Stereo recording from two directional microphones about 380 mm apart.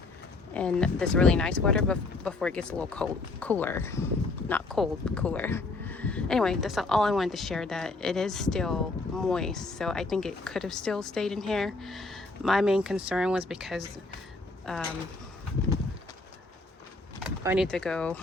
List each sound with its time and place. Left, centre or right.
0.5 s speech: centre
17.2 s speech: centre